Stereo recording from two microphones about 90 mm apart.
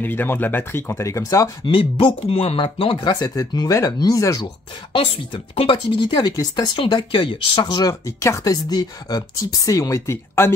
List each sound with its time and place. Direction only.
0.0 s speech: 20° left (ahead or behind)
1.7 s speech: 75° left (ahead or behind); by 3.0 s 90° left
3.0 s speech: 45° left (ahead or behind)
4.9 s speech: 75° left (ahead or behind)
8.5 s speech: 45° left (ahead or behind); by 10.5 s 30° left (ahead or behind)